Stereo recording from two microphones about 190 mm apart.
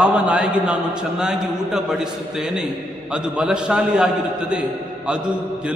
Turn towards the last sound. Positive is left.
turn(degrees=-5)  # may be behind; listen again after turning